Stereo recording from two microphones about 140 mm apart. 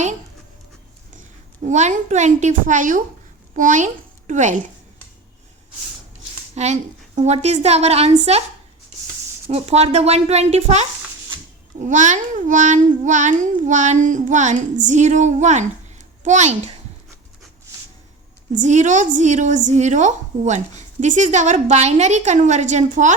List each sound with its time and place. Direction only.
1.6 s a woman's voice: 60° right (ahead or behind)
6.5 s a woman's voice: 50° right (ahead or behind)
9.5 s a woman's voice: 50° right (ahead or behind)
18.6 s a woman's voice: 60° right (ahead or behind)